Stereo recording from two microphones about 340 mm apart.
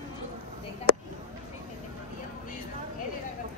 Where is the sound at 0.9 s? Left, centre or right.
Right.